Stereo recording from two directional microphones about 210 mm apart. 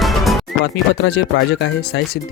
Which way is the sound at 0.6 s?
50° left (ahead or behind).